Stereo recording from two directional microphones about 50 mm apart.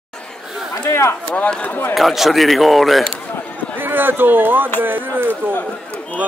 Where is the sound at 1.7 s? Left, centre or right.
Left.